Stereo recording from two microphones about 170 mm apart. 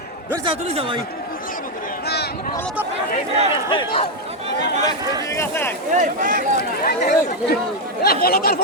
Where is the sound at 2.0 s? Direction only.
70° left (ahead or behind).